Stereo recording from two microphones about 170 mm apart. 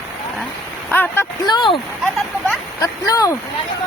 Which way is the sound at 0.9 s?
10° left (ahead or behind).